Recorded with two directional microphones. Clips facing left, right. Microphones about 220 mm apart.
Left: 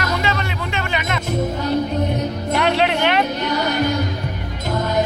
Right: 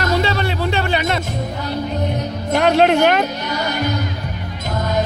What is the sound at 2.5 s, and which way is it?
Music, 45° right (ahead or behind).